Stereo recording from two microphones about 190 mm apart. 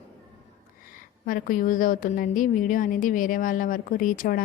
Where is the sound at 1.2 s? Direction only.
45° left (ahead or behind).